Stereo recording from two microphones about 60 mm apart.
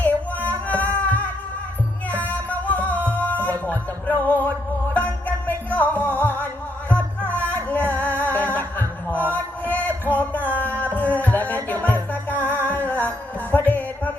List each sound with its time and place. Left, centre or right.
0.0 s music: left